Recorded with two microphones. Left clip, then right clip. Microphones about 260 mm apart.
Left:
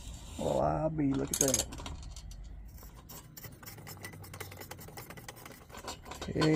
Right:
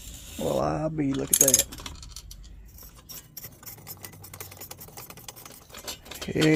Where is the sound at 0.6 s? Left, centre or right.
Right.